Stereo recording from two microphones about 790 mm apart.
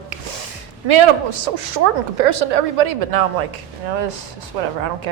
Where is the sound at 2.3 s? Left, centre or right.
Right.